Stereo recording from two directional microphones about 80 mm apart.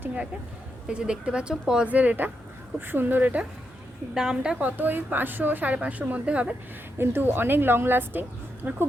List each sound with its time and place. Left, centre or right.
0.0 s a woman's voice: centre
4.1 s a woman's voice: centre
4.6 s a woman's voice: right
7.0 s a woman's voice: right